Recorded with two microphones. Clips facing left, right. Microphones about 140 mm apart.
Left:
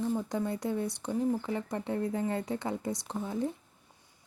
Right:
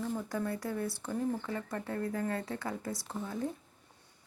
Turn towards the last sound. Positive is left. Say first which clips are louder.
# left 4 dB
turn(degrees=15)  # may be behind; listen again after turning